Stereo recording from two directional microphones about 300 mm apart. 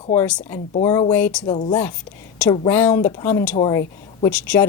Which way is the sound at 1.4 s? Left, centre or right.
Centre.